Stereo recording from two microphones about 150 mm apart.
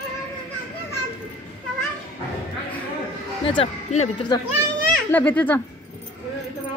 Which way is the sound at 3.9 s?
50° left (ahead or behind).